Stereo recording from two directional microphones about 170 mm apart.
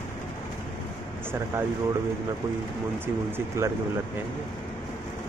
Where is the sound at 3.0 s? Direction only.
10° right (ahead or behind).